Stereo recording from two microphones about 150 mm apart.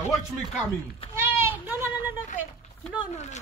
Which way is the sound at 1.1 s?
15° right (ahead or behind).